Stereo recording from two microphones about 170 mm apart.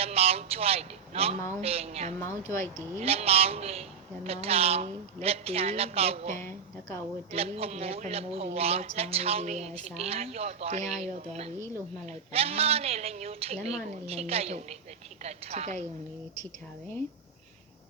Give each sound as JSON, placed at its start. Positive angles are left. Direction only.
{"t": 0.0, "sound": "a man's voice", "side_deg": -35}